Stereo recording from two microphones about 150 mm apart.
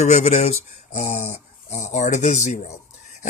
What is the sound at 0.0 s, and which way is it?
Speech, 50° left (ahead or behind).